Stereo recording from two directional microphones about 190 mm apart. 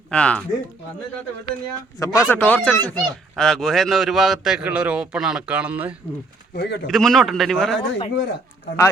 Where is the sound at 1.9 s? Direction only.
15° left (ahead or behind); by 5.9 s 5° right (ahead or behind).